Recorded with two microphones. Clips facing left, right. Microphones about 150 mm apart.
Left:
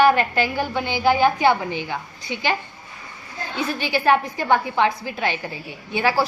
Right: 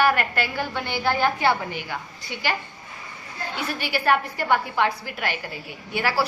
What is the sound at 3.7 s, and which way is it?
A woman's voice, 20° left (ahead or behind).